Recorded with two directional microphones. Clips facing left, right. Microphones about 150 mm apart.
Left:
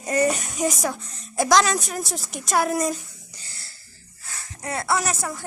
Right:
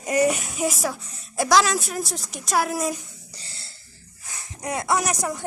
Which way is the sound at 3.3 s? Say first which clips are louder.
Right 2 dB; 30° right (ahead or behind).